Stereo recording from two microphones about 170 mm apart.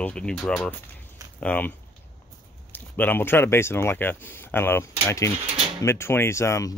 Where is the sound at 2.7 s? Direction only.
10° left (ahead or behind).